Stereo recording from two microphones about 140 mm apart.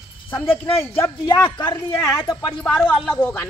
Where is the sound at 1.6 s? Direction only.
15° left (ahead or behind).